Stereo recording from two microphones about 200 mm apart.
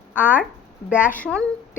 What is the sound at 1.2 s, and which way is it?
Speech, 5° left (ahead or behind).